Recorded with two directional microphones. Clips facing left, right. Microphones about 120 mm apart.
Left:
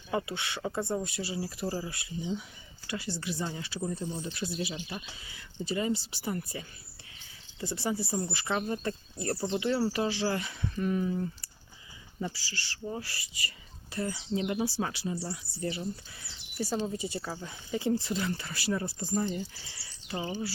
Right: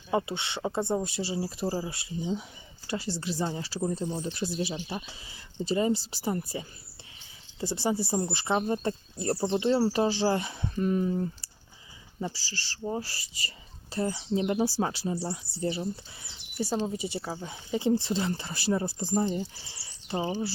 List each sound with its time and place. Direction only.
0.1 s speech: 25° right (ahead or behind)